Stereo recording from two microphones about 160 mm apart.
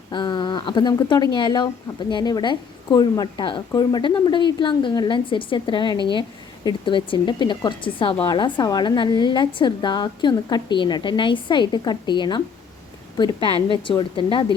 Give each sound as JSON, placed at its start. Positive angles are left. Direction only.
{"t": 0.1, "sound": "a woman's voice", "side_deg": 30}